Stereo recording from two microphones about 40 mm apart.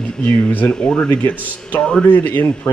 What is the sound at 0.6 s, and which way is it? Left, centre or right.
Speech, left.